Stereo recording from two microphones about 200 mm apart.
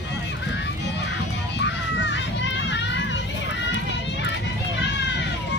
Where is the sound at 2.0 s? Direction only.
60° left (ahead or behind).